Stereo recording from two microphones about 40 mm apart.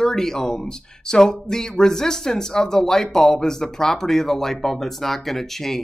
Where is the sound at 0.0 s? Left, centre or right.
Centre.